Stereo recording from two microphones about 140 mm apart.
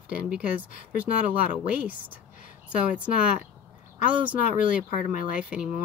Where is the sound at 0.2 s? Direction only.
10° right (ahead or behind).